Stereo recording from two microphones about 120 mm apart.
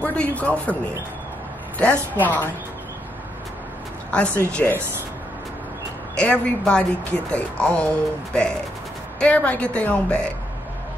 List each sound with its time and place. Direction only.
0.0 s speech: 10° left (ahead or behind)
1.8 s speech: 15° left (ahead or behind)
4.5 s speech: 10° left (ahead or behind)
6.1 s speech: 10° left (ahead or behind)